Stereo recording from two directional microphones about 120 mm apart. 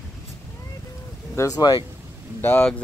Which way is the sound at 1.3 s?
30° left (ahead or behind).